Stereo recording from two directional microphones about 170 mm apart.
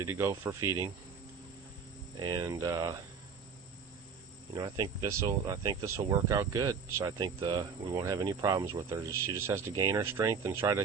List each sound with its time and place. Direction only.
0.0 s speech: 15° right (ahead or behind)
2.1 s speech: 25° right (ahead or behind)
4.5 s speech: 25° right (ahead or behind)